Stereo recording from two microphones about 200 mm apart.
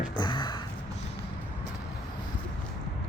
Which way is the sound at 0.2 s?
25° left (ahead or behind).